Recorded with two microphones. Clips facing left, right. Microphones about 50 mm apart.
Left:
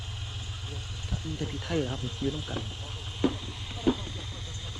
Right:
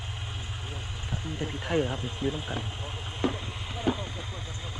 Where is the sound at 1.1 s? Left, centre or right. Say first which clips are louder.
Right 1 dB; right.